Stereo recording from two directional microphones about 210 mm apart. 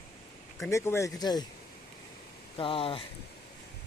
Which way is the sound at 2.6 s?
25° left (ahead or behind).